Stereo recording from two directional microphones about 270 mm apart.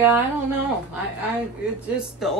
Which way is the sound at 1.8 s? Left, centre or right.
Centre.